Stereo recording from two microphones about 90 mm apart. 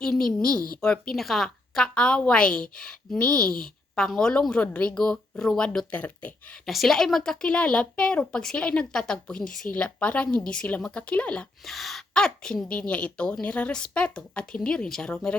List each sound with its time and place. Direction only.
0.0 s a woman's voice: 5° left (ahead or behind)
6.7 s a woman's voice: centre (ahead or behind)
11.6 s a woman's voice: centre (ahead or behind)